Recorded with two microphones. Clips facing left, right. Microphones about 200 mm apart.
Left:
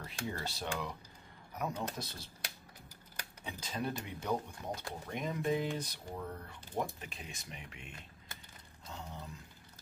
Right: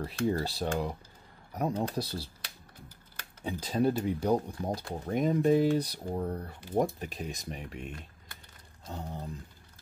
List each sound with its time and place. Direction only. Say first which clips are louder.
0.0 s speech: right 11 dB; 35° right (ahead or behind)
3.6 s speech: right 12 dB; 35° right (ahead or behind)